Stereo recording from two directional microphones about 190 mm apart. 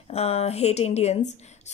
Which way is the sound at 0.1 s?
35° left (ahead or behind).